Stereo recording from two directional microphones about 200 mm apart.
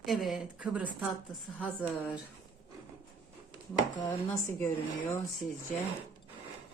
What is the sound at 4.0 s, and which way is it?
Speech, 40° left (ahead or behind).